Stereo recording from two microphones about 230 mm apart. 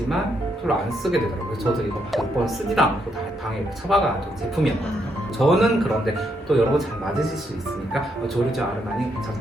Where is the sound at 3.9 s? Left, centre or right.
Centre.